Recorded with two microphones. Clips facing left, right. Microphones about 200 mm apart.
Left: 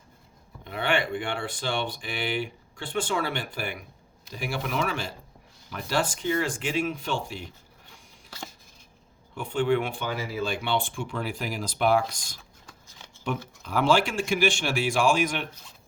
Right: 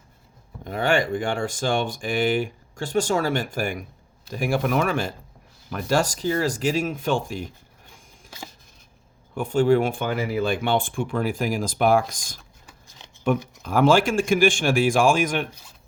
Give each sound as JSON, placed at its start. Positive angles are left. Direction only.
{"t": 0.6, "sound": "speech", "side_deg": -45}
{"t": 9.3, "sound": "speech", "side_deg": -45}
{"t": 13.3, "sound": "speech", "side_deg": -55}